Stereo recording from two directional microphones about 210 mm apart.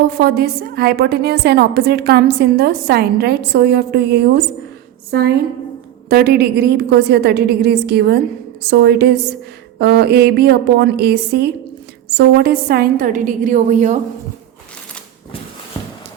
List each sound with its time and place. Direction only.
0.1 s a woman's voice: 50° right (ahead or behind)